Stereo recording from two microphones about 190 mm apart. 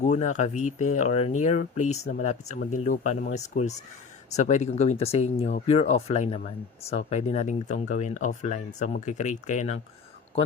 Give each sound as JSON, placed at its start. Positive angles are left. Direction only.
{"t": 0.0, "sound": "speech", "side_deg": 40}